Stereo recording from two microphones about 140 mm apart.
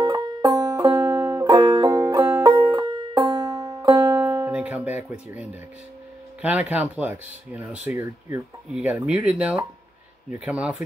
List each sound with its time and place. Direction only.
0.0 s music: 30° right (ahead or behind)
1.4 s music: 30° right (ahead or behind)
2.8 s banjo: 30° right (ahead or behind); by 5.6 s 10° right (ahead or behind)
6.4 s speech: 10° right (ahead or behind)
8.8 s speech: 10° right (ahead or behind)